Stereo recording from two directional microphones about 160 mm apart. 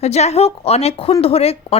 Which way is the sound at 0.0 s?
45° left (ahead or behind).